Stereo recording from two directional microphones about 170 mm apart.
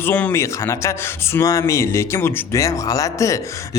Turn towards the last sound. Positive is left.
turn(degrees=20)  # may be behind; listen again after turning